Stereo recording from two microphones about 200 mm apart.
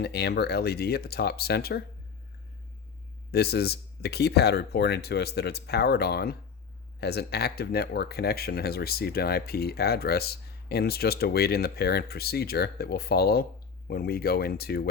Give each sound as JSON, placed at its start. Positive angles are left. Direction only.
{"t": 0.0, "sound": "speech", "side_deg": 55}
{"t": 3.3, "sound": "speech", "side_deg": 55}